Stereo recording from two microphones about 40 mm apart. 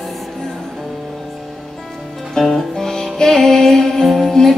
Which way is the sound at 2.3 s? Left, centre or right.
Centre.